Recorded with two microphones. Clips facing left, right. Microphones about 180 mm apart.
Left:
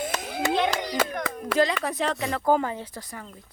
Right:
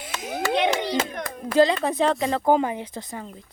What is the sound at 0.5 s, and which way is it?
Clapping, 20° right (ahead or behind).